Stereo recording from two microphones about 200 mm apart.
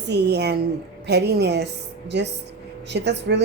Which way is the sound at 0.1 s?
55° right (ahead or behind).